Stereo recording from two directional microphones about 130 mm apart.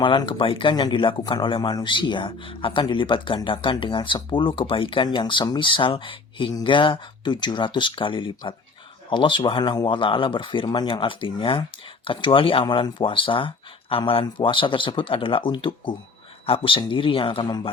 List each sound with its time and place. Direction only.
0.0 s speech: 40° left (ahead or behind)